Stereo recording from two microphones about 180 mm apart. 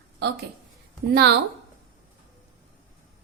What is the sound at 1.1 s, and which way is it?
Speech, 65° right (ahead or behind).